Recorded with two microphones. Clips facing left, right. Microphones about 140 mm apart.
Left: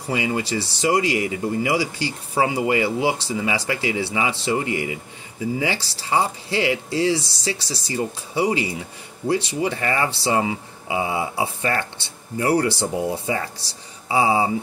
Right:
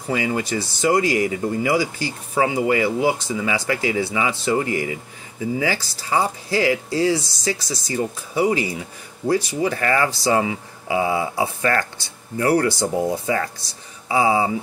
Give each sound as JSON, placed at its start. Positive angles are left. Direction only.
{"t": 0.1, "sound": "speech", "side_deg": 25}